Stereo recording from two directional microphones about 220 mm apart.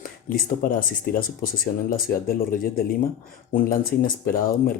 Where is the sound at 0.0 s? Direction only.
40° left (ahead or behind).